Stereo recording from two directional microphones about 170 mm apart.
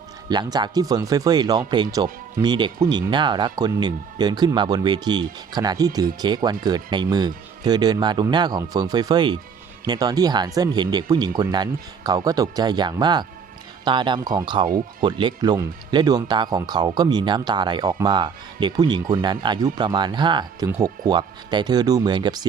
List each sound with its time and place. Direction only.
0.3 s speech: 25° right (ahead or behind)